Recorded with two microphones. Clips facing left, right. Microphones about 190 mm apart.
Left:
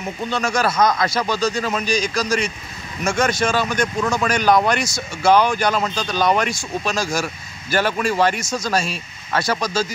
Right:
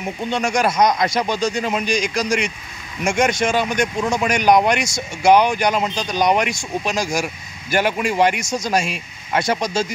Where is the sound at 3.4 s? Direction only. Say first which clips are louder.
Right 1 dB; 20° right (ahead or behind).